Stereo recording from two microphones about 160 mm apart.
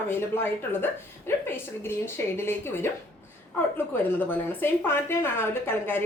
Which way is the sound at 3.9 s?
10° left (ahead or behind).